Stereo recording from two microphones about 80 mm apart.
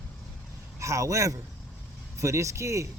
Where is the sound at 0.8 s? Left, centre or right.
Right.